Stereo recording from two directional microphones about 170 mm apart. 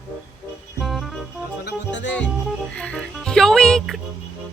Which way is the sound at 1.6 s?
90° left.